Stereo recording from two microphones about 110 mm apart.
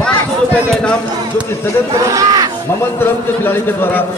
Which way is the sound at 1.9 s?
30° right (ahead or behind).